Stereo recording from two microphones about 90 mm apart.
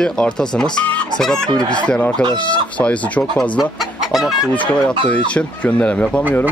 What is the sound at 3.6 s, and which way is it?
Chicken, centre (ahead or behind).